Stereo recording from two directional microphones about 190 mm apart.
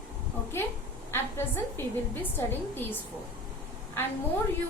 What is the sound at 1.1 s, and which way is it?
Speech, 10° left (ahead or behind).